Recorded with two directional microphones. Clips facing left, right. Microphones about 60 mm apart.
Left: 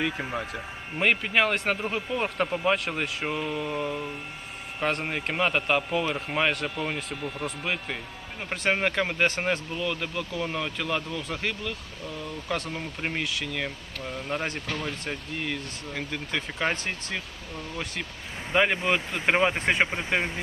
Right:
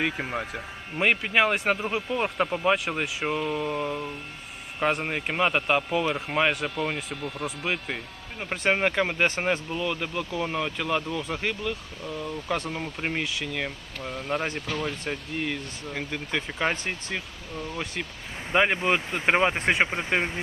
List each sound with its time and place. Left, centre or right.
0.1 s speech: centre
16.7 s speech: right
18.5 s speech: centre